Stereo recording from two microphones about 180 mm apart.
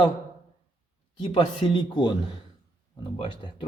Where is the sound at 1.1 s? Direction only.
25° left (ahead or behind).